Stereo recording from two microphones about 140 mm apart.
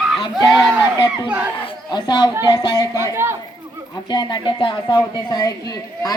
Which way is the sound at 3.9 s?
30° left (ahead or behind).